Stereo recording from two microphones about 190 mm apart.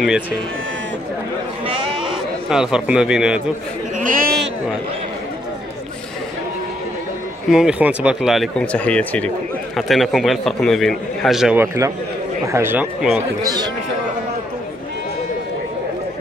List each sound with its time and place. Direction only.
2.5 s a man's voice: 5° right (ahead or behind)
4.0 s chatter: 45° right (ahead or behind)
7.5 s a man's voice: 5° right (ahead or behind)
13.4 s a man's voice: 20° right (ahead or behind)